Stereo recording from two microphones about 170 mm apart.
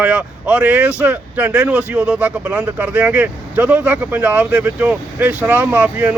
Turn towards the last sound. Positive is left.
turn(degrees=-10)  # may be behind; listen again after turning